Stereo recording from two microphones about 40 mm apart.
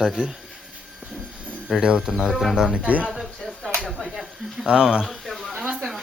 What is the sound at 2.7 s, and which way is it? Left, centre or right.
Speech, right.